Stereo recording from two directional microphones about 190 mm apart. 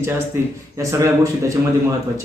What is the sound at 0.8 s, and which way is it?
Speech, 15° right (ahead or behind).